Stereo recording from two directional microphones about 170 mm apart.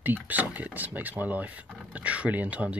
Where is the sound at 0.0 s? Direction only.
10° right (ahead or behind).